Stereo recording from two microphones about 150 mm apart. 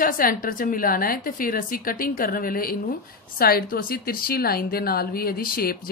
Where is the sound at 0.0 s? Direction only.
70° left (ahead or behind).